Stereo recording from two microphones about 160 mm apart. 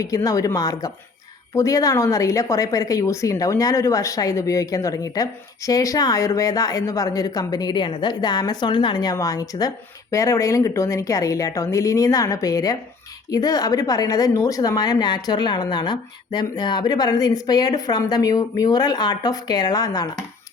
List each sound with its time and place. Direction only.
0.0 s a woman's voice: 20° left (ahead or behind)